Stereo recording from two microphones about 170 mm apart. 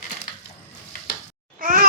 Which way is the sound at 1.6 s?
55° right (ahead or behind).